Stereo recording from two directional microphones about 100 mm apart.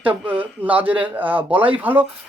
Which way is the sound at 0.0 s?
15° right (ahead or behind).